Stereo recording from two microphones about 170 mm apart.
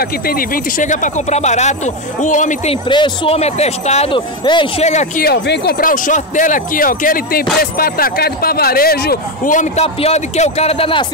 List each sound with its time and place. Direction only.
0.7 s a man's voice: 45° left (ahead or behind)
2.9 s speech: 30° left (ahead or behind)
5.2 s a man's voice: 70° left (ahead or behind); by 11.1 s 30° left (ahead or behind)